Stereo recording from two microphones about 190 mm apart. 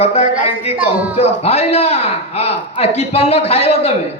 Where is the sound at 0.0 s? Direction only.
35° left (ahead or behind).